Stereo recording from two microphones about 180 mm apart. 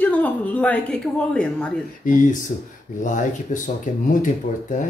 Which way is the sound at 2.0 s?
50° left (ahead or behind).